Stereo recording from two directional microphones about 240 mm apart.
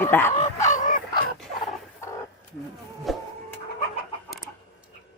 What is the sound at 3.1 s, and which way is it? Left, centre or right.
Printer, centre.